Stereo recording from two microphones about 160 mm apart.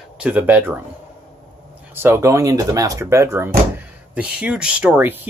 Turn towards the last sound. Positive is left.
turn(degrees=-10)  # may be behind; listen again after turning